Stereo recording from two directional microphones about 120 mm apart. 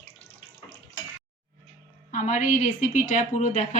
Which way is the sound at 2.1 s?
90° left.